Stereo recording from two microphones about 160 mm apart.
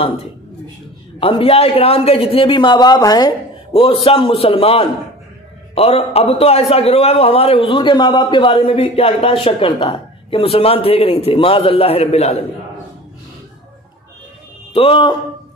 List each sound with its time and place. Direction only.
1.2 s a man's voice: 35° left (ahead or behind)
14.7 s a man's voice: 35° left (ahead or behind)